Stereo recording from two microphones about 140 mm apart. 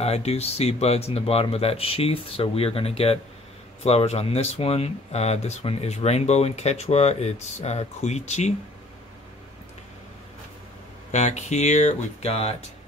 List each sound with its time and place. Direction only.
0.0 s speech: 50° left (ahead or behind)
11.1 s speech: 55° left (ahead or behind)